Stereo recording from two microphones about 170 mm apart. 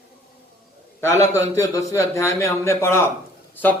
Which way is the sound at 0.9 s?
20° left (ahead or behind).